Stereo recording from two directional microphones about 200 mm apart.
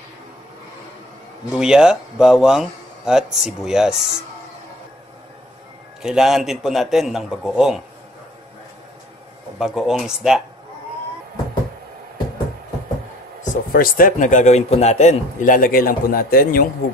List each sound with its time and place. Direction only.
1.6 s a man's voice: 5° right (ahead or behind)
6.0 s a man's voice: centre (ahead or behind)
9.6 s a man's voice: centre (ahead or behind)
13.4 s a man's voice: 45° left (ahead or behind)